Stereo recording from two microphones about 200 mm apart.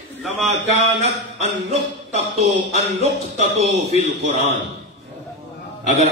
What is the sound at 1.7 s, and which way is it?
Speech, 30° right (ahead or behind).